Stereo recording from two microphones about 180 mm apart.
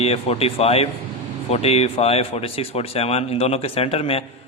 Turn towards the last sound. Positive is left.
turn(degrees=35)  # may be behind; listen again after turning